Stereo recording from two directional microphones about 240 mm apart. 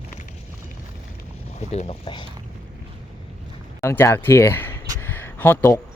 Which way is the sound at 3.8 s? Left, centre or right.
Centre.